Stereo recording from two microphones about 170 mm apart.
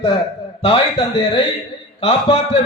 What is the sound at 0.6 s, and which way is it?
A man's voice, 35° left (ahead or behind).